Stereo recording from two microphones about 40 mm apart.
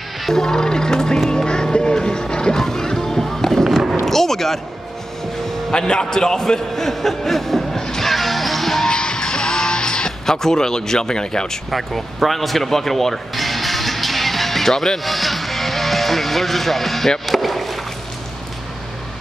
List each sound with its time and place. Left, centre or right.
0.3 s speech: centre
1.3 s music: centre
4.0 s artillery fire: centre
5.7 s a sound: centre
8.8 s music: centre
11.7 s music: centre
17.3 s rowboat: centre